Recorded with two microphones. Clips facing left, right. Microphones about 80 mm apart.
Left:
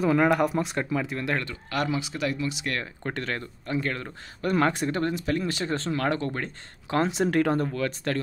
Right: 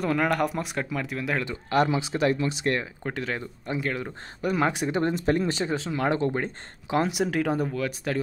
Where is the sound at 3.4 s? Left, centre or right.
Centre.